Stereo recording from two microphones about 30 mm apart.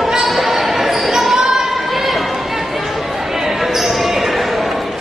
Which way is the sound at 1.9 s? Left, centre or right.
Centre.